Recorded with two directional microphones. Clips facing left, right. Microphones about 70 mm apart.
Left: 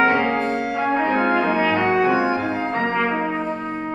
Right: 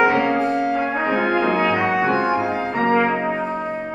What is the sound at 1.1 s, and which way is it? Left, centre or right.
Brass instrument, centre.